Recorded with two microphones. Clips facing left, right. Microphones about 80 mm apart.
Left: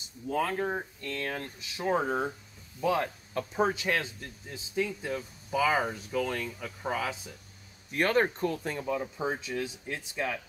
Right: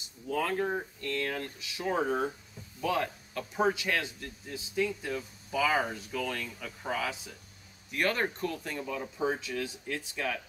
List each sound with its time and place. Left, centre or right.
0.3 s speech: left
7.9 s speech: left